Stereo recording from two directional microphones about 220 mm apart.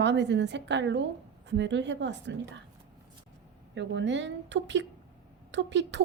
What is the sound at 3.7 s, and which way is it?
A woman's voice, 55° right (ahead or behind).